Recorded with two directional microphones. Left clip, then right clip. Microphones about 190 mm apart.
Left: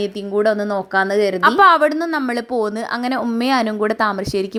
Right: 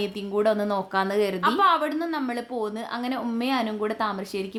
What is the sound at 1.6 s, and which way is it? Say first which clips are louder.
A woman's voice: left 10 dB; 40° left (ahead or behind).